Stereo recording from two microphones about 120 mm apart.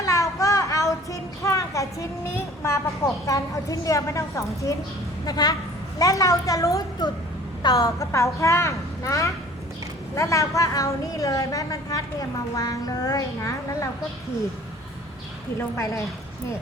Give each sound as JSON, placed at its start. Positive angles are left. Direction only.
{"t": 0.0, "sound": "child singing", "side_deg": 25}
{"t": 2.6, "sound": "a woman's voice", "side_deg": 20}
{"t": 15.7, "sound": "a woman's voice", "side_deg": 25}